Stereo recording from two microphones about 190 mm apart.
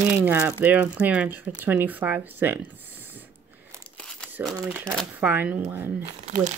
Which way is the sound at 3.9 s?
5° left (ahead or behind).